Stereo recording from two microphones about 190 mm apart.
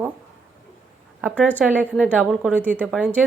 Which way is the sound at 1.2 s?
5° right (ahead or behind).